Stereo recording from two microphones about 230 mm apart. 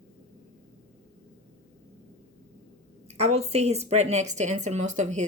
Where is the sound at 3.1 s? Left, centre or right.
Right.